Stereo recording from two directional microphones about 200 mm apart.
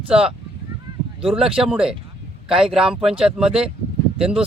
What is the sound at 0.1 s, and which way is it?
Speech, 5° right (ahead or behind).